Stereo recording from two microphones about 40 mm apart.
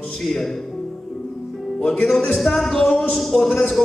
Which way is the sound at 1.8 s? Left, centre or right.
Centre.